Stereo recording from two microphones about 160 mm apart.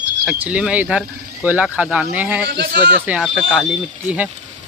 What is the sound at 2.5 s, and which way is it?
Speech, 85° right.